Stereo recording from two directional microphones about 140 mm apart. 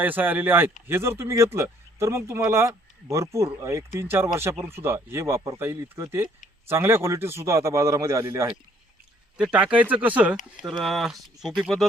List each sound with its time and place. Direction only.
0.0 s speech: 15° right (ahead or behind)
9.4 s speech: 5° right (ahead or behind)